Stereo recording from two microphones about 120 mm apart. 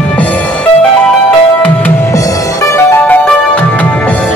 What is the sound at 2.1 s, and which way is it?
Music, 30° left (ahead or behind).